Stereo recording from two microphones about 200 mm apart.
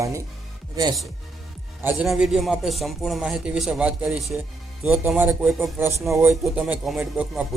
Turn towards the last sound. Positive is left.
turn(degrees=-5)  # may be behind; listen again after turning